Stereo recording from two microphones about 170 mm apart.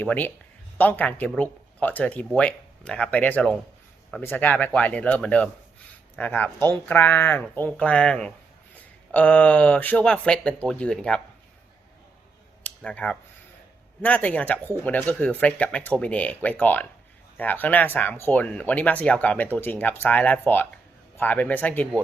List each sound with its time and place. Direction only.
0.0 s speech: 10° left (ahead or behind)
12.6 s a sound: 10° left (ahead or behind)
14.0 s speech: 10° left (ahead or behind)